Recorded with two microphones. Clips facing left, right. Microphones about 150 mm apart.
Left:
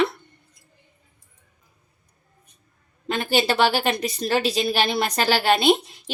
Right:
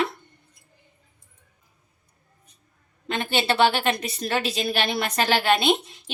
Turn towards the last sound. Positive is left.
turn(degrees=35)  # may be behind; listen again after turning